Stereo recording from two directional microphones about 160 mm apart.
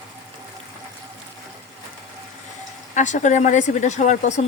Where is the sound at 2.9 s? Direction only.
50° left (ahead or behind).